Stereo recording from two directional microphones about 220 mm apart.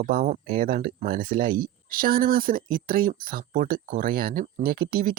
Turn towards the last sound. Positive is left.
turn(degrees=-40)  # may be behind; listen again after turning